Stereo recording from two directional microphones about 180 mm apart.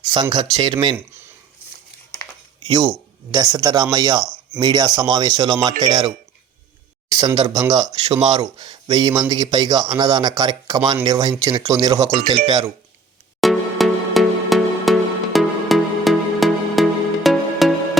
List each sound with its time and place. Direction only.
0.0 s a man's voice: 25° right (ahead or behind)
3.3 s a man's voice: 25° right (ahead or behind)
7.1 s a man's voice: 25° right (ahead or behind)
8.0 s speech: 35° right (ahead or behind)
8.3 s a man's voice: 20° right (ahead or behind)
13.4 s music: centre (ahead or behind)